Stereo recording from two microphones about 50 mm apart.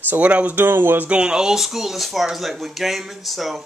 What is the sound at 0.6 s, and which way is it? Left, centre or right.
Speech, right.